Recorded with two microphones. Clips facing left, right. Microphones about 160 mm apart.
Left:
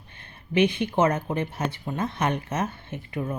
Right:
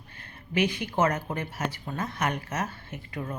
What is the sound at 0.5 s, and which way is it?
Speech, 25° left (ahead or behind).